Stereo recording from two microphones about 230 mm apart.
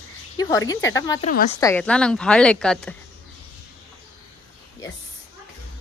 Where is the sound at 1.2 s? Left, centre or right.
Left.